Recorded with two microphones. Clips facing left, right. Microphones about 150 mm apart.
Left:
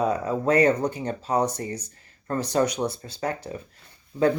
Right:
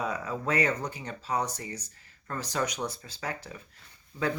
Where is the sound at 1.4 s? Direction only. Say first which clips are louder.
Left 8 dB; 55° left (ahead or behind).